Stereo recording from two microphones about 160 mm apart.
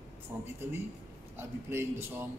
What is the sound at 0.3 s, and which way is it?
A man's voice, 10° right (ahead or behind).